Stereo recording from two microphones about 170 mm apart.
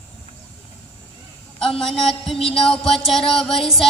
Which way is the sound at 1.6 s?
5° left (ahead or behind).